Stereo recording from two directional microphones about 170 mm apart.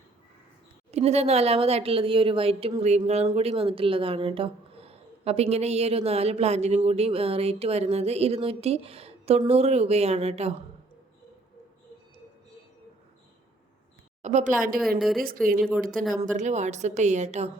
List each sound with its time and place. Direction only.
0.9 s speech: 40° right (ahead or behind)
14.2 s speech: 45° right (ahead or behind)
14.8 s a woman's voice: centre (ahead or behind)
16.2 s a woman's voice: 45° right (ahead or behind)